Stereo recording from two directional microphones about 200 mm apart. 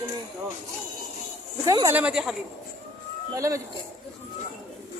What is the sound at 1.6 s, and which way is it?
Speech, 20° right (ahead or behind).